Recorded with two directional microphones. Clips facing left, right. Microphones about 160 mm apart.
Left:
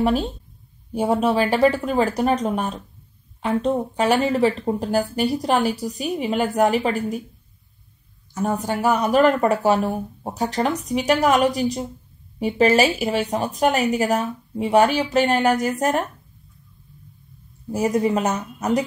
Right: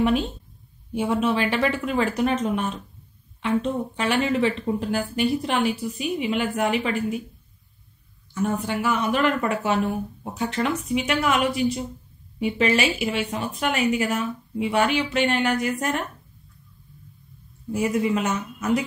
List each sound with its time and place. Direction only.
0.0 s speech: 35° left (ahead or behind)
8.4 s speech: 40° left (ahead or behind)
17.6 s speech: 40° left (ahead or behind)